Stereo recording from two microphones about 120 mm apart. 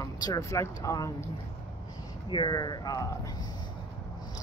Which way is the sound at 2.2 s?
40° left (ahead or behind).